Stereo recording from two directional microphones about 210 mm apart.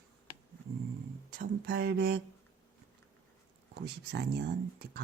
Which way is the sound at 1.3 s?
45° right (ahead or behind).